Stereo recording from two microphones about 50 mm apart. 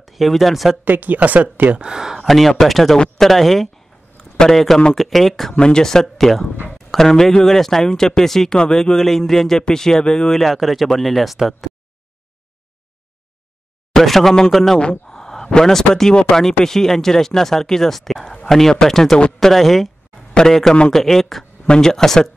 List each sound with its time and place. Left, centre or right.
0.0 s speech: centre
0.8 s speech: right
1.8 s speech: centre
2.1 s speech: centre
4.2 s a sound: centre
4.9 s a man's voice: centre
8.5 s a man's voice: centre
10.4 s speech: centre
13.9 s a man's voice: centre
21.6 s speech: centre
21.9 s a man's voice: centre